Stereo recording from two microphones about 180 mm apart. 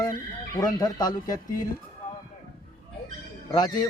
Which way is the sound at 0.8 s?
20° left (ahead or behind).